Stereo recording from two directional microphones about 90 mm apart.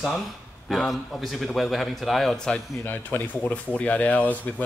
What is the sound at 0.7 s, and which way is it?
A man's voice, centre (ahead or behind).